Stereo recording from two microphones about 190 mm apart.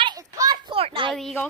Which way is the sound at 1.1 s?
Centre (ahead or behind).